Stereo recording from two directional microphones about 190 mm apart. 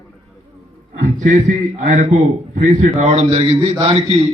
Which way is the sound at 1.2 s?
40° right (ahead or behind).